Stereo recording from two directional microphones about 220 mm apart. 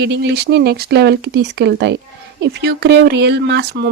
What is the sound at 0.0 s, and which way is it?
Speech, 50° right (ahead or behind).